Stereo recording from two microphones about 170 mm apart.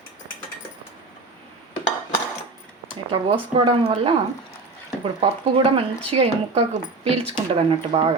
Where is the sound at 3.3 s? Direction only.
35° right (ahead or behind).